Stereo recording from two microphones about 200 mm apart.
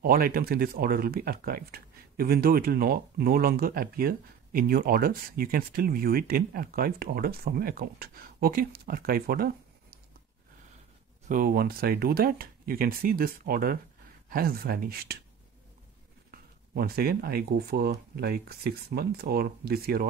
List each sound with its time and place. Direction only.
0.0 s speech: 45° right (ahead or behind)
11.2 s speech: 45° right (ahead or behind)
16.3 s speech: 50° right (ahead or behind)